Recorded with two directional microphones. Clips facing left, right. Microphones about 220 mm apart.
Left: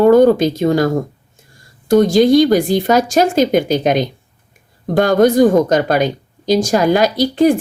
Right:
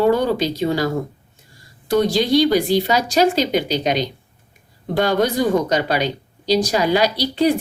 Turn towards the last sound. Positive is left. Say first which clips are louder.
# left 5 dB
turn(degrees=50)  # may be behind; listen again after turning